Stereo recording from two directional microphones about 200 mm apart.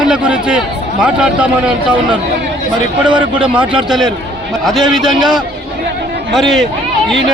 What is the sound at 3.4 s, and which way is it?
A man's voice, 5° right (ahead or behind).